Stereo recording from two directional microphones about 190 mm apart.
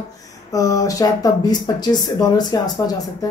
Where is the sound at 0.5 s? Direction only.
20° left (ahead or behind).